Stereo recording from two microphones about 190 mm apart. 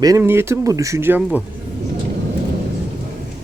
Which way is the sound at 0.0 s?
15° right (ahead or behind).